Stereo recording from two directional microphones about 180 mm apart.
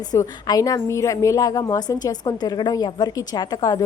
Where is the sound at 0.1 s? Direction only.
20° left (ahead or behind).